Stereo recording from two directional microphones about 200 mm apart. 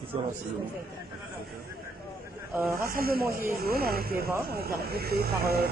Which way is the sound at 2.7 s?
45° right (ahead or behind).